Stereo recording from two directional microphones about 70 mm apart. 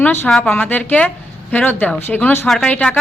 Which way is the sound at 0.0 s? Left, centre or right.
Left.